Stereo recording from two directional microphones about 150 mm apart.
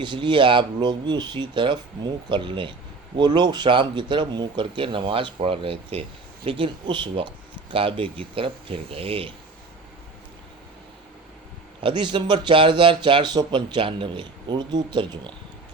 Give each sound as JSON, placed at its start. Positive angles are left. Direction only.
{"t": 0.0, "sound": "speech", "side_deg": -30}
{"t": 11.8, "sound": "speech", "side_deg": -35}